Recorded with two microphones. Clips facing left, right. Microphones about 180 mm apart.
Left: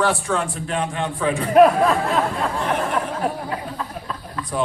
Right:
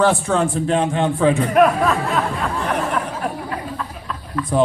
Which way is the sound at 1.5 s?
30° left (ahead or behind).